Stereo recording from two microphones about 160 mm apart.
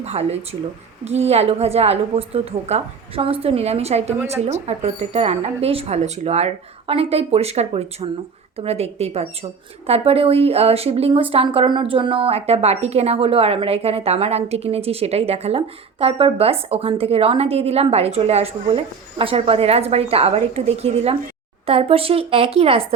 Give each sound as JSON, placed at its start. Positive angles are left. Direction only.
{"t": 0.0, "sound": "a woman's voice", "side_deg": -40}